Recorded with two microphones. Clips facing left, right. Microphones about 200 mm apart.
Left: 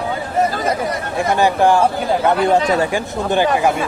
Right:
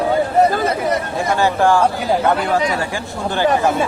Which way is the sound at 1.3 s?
15° left (ahead or behind).